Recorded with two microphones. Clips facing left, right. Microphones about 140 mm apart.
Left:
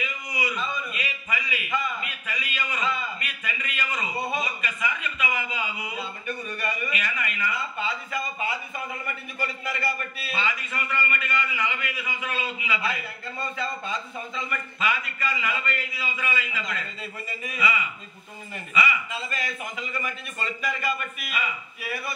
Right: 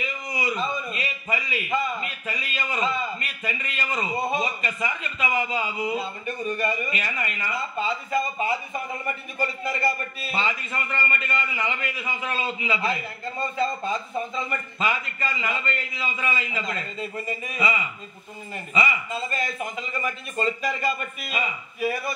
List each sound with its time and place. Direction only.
0.0 s a man's voice: 30° right (ahead or behind)